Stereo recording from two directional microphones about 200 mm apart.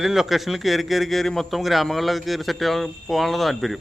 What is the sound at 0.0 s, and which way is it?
A man's voice, centre (ahead or behind).